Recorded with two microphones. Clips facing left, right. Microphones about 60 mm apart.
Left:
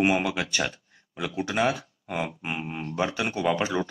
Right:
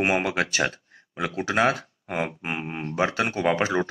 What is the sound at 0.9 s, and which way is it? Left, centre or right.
Speech, right.